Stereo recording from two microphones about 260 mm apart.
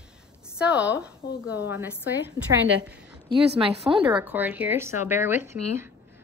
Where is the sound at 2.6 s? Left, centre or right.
Right.